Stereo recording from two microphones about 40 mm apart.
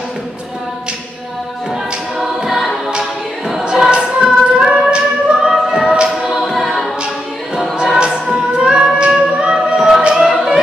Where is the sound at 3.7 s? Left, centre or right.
Right.